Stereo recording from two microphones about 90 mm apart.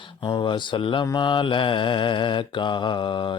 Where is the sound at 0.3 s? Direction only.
55° left (ahead or behind).